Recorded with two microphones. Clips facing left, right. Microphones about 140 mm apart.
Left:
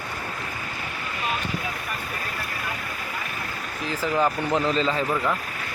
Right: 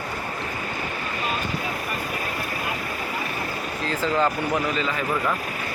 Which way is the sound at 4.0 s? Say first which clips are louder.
Even; 15° left (ahead or behind).